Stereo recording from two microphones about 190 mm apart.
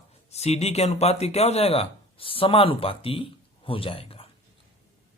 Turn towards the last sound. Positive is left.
turn(degrees=30)  # may be behind; listen again after turning